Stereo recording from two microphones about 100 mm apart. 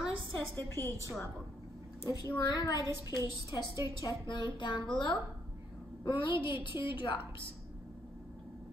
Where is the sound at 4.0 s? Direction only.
50° left (ahead or behind).